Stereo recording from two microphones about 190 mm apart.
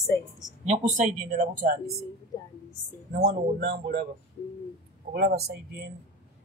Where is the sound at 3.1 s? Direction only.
55° right (ahead or behind).